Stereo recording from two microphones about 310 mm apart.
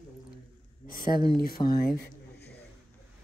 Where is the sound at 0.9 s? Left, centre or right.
Left.